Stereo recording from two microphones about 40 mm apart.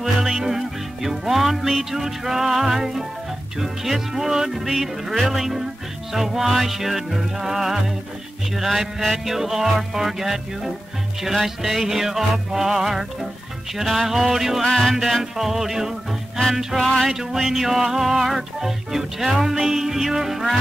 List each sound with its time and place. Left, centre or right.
0.0 s music: centre
5.1 s music: centre
14.6 s music: centre
17.1 s music: centre